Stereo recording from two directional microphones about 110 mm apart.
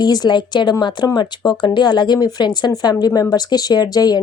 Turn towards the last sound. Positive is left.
turn(degrees=35)  # may be behind; listen again after turning